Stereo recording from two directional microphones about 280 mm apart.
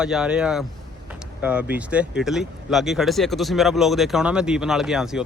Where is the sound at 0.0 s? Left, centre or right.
Centre.